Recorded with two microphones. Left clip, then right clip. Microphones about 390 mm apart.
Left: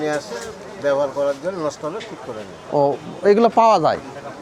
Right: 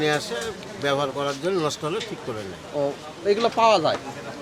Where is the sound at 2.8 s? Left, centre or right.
Left.